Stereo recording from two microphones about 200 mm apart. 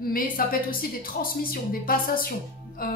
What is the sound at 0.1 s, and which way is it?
Speech, 45° left (ahead or behind).